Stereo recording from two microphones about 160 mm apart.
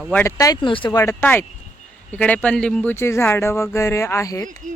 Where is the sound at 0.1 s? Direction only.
15° left (ahead or behind); by 0.9 s 30° left (ahead or behind).